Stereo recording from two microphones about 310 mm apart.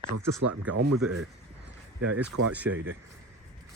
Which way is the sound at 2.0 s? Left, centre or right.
Right.